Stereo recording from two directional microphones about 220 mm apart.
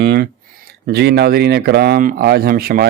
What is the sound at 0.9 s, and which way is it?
Speech, 50° right (ahead or behind).